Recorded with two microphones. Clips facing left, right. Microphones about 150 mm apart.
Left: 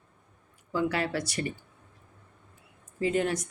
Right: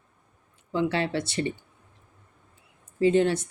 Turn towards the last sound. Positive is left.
turn(degrees=-30)  # may be behind; listen again after turning